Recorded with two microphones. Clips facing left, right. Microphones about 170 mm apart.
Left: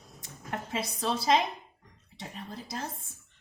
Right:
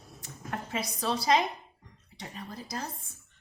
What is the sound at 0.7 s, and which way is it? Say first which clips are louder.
Speech: even; 25° left (ahead or behind).